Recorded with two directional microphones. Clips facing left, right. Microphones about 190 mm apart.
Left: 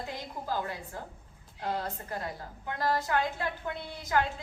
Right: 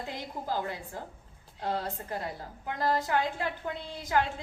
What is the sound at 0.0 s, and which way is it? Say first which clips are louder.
A woman's voice: right 1 dB; 15° right (ahead or behind).